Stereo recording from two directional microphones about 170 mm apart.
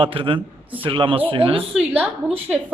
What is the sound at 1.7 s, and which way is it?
Speech, 5° right (ahead or behind).